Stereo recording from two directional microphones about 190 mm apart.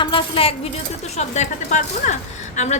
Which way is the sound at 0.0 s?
25° left (ahead or behind).